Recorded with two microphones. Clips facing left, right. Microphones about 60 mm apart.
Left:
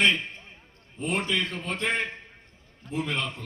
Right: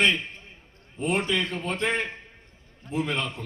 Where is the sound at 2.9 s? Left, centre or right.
Right.